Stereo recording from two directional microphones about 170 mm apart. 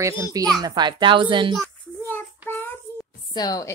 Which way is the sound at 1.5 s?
5° left (ahead or behind).